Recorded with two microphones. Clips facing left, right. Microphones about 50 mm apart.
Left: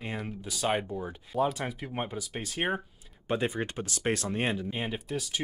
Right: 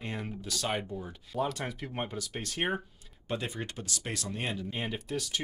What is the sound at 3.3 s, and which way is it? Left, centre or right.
Speech, left.